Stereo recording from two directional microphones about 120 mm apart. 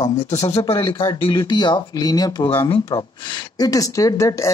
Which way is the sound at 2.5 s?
50° left (ahead or behind).